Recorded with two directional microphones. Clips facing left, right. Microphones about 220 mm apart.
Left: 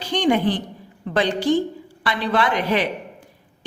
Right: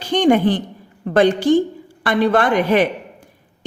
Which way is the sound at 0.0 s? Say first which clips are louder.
Right 5 dB; 50° right (ahead or behind).